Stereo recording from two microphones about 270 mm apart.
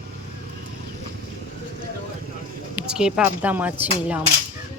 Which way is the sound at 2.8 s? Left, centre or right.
Centre.